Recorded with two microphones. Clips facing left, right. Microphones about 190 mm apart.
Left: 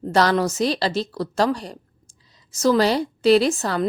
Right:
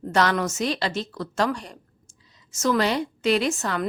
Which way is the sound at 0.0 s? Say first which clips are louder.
Left 4 dB; 35° left (ahead or behind).